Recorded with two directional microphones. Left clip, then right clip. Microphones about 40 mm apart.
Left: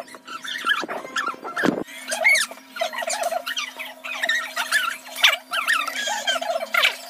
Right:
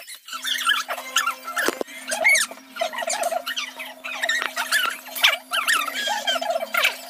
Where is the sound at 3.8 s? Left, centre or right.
Centre.